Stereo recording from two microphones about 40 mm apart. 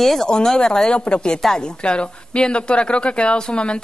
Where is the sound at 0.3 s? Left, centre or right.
Centre.